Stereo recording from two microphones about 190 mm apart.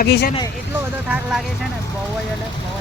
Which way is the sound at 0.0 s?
55° left (ahead or behind).